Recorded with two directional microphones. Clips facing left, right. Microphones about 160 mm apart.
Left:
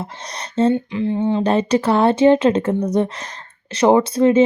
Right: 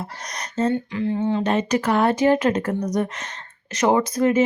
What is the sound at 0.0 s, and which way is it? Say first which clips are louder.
Speech: left 3 dB; 25° left (ahead or behind).